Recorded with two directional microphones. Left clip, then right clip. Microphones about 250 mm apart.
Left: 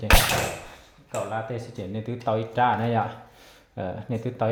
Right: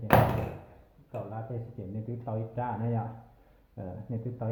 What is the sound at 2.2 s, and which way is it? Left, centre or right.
Speech, left.